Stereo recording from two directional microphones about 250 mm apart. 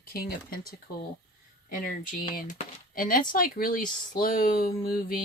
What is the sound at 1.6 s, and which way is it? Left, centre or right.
Speech, left.